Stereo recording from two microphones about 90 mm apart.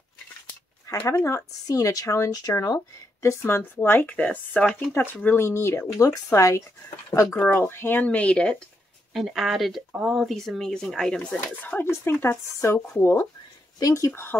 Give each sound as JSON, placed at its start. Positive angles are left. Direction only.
{"t": 1.0, "sound": "speech", "side_deg": 35}
{"t": 3.8, "sound": "speech", "side_deg": 20}
{"t": 9.1, "sound": "speech", "side_deg": 0}
{"t": 11.6, "sound": "speech", "side_deg": 25}
{"t": 12.6, "sound": "speech", "side_deg": 35}